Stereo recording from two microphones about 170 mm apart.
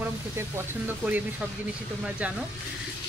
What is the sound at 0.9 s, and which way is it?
Speech, 10° right (ahead or behind).